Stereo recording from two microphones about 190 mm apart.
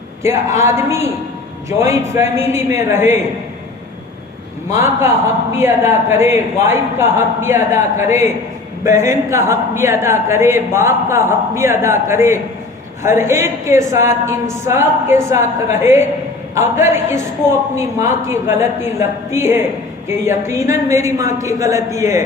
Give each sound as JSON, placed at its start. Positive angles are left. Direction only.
{"t": 0.2, "sound": "a woman's voice", "side_deg": -15}
{"t": 4.7, "sound": "a woman's voice", "side_deg": -15}
{"t": 8.8, "sound": "a woman's voice", "side_deg": -15}